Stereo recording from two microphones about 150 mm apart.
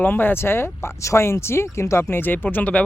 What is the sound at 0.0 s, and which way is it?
Speech, 15° left (ahead or behind).